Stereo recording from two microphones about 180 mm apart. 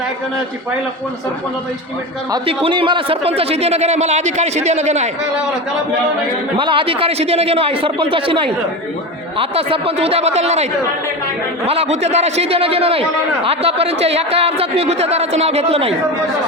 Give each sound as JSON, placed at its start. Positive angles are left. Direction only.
{"t": 2.5, "sound": "a man's voice", "side_deg": -30}
{"t": 6.6, "sound": "a man's voice", "side_deg": -30}